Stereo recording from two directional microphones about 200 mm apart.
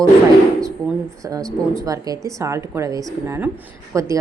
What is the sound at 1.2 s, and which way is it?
A woman's voice, 15° right (ahead or behind).